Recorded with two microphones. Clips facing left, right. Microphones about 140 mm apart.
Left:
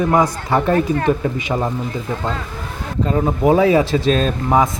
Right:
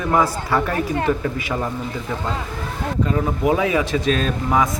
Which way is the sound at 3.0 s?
35° left (ahead or behind).